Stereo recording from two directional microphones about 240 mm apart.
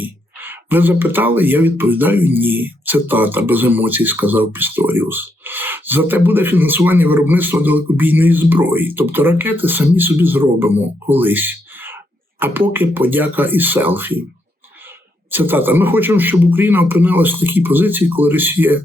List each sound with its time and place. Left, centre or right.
0.0 s speech: centre
15.3 s speech: centre